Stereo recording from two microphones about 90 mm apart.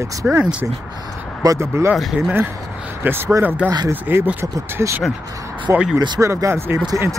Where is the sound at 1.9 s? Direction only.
Centre (ahead or behind).